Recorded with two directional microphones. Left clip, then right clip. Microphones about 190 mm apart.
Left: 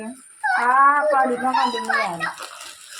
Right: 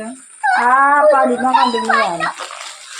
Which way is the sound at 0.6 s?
45° right (ahead or behind).